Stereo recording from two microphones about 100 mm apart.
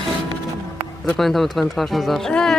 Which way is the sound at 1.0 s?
Centre (ahead or behind).